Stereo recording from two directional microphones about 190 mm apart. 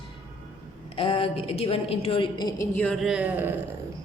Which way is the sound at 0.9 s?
30° left (ahead or behind).